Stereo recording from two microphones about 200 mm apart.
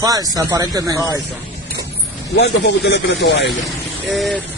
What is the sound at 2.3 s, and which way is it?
Speech, 60° left (ahead or behind).